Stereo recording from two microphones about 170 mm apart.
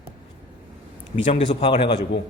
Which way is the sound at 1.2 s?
45° left (ahead or behind).